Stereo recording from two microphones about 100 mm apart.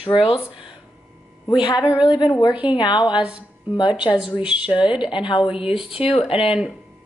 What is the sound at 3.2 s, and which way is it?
Speech, 10° right (ahead or behind).